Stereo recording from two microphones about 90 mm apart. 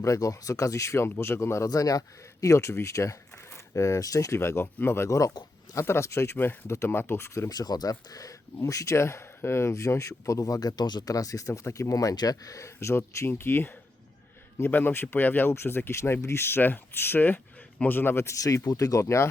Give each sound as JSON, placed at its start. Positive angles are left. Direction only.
{"t": 0.0, "sound": "speech", "side_deg": 40}
{"t": 18.4, "sound": "speech", "side_deg": 40}